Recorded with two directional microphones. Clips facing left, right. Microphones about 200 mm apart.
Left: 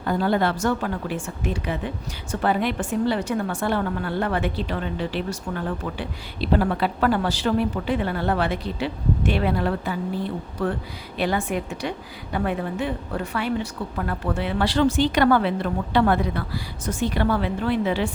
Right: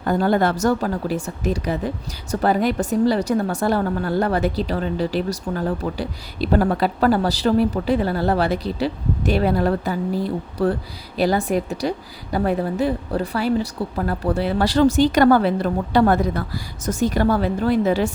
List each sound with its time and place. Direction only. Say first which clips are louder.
0.0 s a woman's voice: right 3 dB; 45° right (ahead or behind)